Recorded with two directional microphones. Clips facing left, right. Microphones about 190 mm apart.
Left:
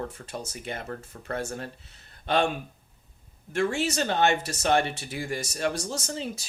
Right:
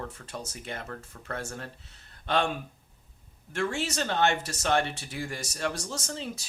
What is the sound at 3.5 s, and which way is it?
Speech, 15° left (ahead or behind).